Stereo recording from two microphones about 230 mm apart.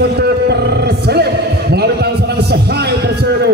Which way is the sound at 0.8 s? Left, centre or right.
Right.